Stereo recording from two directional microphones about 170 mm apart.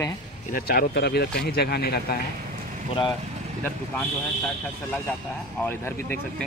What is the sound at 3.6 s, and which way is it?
Speech, 10° left (ahead or behind).